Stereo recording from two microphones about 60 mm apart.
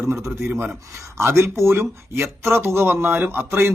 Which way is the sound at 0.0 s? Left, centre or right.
Right.